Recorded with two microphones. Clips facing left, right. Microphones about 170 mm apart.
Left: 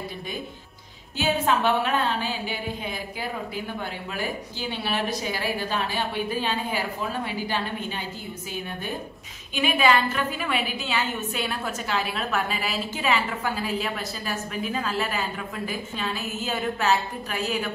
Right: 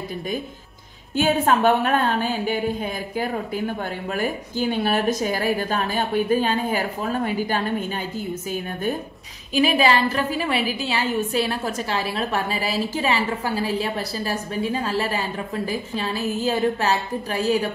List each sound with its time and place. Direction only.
1.1 s a woman's voice: 50° right (ahead or behind)
9.5 s a woman's voice: 35° right (ahead or behind)